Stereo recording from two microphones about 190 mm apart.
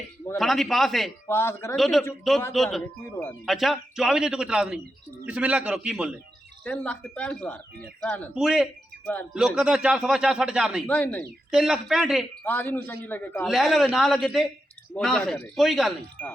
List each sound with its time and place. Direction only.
0.3 s a man's voice: centre (ahead or behind)
1.3 s speech: 15° left (ahead or behind)
1.7 s a man's voice: centre (ahead or behind)
6.7 s a man's voice: 5° left (ahead or behind)
9.6 s a man's voice: 5° right (ahead or behind)
10.8 s speech: 10° left (ahead or behind)
11.5 s a man's voice: centre (ahead or behind)
12.5 s a man's voice: 10° left (ahead or behind)